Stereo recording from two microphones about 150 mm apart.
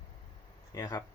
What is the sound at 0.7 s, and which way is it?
Speech, 25° left (ahead or behind).